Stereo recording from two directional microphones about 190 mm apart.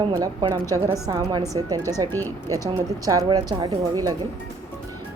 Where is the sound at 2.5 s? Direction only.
20° right (ahead or behind).